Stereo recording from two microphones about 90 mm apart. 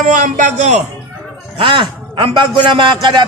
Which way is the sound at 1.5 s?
80° right.